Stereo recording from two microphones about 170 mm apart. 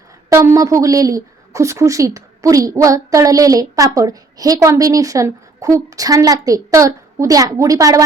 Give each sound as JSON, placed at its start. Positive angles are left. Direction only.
{"t": 0.3, "sound": "a woman's voice", "side_deg": -15}